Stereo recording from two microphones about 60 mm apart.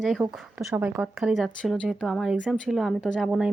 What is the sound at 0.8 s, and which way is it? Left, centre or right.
Speech, right.